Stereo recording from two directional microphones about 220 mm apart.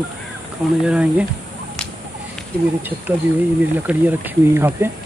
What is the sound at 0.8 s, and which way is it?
Speech, 5° right (ahead or behind).